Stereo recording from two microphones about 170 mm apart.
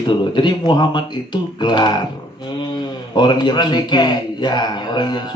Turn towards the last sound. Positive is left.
turn(degrees=25)  # may be behind; listen again after turning